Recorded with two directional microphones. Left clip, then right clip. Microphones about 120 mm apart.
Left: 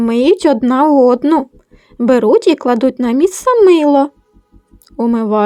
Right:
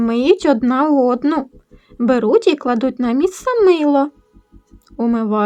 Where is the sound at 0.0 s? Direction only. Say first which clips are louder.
Left 3 dB; 35° left (ahead or behind).